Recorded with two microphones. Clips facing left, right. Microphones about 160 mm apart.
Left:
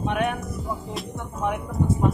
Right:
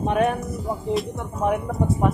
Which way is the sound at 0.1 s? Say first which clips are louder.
Right 5 dB; 40° right (ahead or behind).